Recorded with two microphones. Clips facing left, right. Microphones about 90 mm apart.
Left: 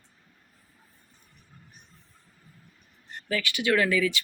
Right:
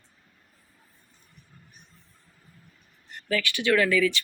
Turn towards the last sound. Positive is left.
turn(degrees=20)  # may be behind; listen again after turning